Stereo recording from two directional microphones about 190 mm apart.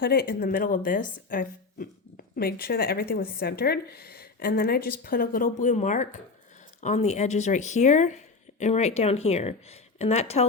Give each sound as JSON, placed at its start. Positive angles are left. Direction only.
{"t": 0.0, "sound": "speech", "side_deg": 50}